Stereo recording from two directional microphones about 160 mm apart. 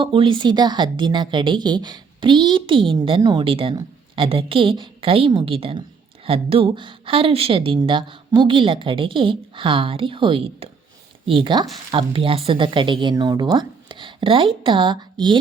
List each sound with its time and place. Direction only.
0.0 s a woman's voice: 35° right (ahead or behind)